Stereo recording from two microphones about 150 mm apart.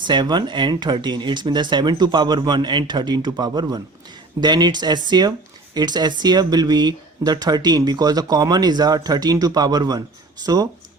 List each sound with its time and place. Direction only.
0.0 s speech: 30° right (ahead or behind)